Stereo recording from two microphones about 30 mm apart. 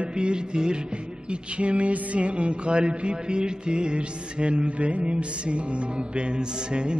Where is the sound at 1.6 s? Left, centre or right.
Right.